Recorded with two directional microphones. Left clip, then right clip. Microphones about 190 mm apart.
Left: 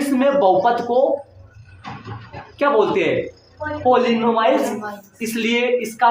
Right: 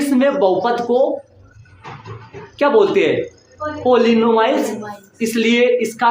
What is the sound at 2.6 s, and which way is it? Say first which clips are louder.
A woman's voice: right 3 dB; 40° right (ahead or behind).